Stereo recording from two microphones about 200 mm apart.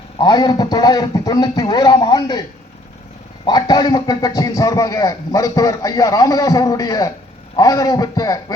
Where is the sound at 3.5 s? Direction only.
20° left (ahead or behind).